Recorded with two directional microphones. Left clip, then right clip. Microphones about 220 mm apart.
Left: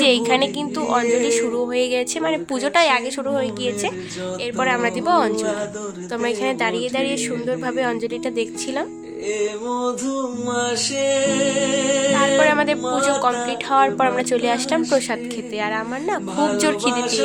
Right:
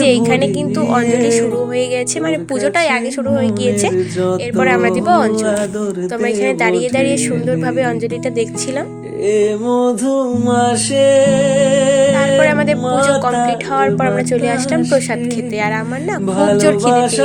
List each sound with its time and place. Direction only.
0.0 s music: 5° right (ahead or behind)
1.2 s speech: 5° right (ahead or behind)
3.6 s speech: 20° right (ahead or behind)
4.5 s music: 10° right (ahead or behind)
9.2 s music: 40° right (ahead or behind)
12.4 s music: 10° right (ahead or behind)
13.5 s speech: 5° right (ahead or behind)
16.6 s speech: 5° right (ahead or behind)
16.9 s music: 40° right (ahead or behind)